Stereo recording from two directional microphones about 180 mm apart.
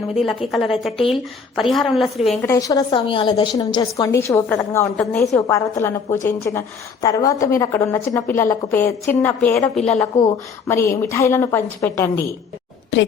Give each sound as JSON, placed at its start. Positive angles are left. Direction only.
{"t": 0.1, "sound": "a woman's voice", "side_deg": 0}
{"t": 2.5, "sound": "a woman's voice", "side_deg": 20}
{"t": 12.9, "sound": "a woman's voice", "side_deg": 75}